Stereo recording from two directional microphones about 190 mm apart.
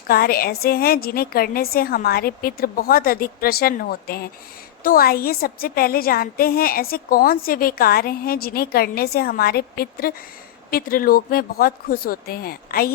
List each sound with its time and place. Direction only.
0.1 s a woman's voice: 50° left (ahead or behind)